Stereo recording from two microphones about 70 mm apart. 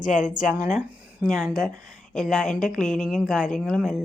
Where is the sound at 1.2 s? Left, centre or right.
Centre.